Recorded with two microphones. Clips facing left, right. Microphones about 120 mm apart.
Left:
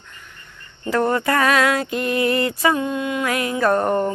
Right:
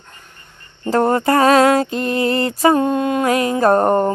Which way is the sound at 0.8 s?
35° right (ahead or behind).